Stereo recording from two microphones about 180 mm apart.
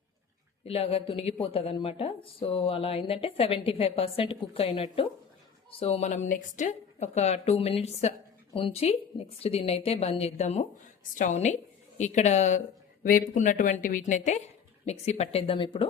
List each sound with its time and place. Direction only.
0.6 s speech: 35° left (ahead or behind)